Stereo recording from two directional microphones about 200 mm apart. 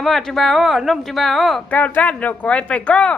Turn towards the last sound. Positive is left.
turn(degrees=5)  # may be behind; listen again after turning